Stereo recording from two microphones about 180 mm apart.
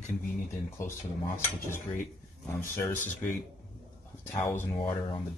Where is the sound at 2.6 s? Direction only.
15° left (ahead or behind).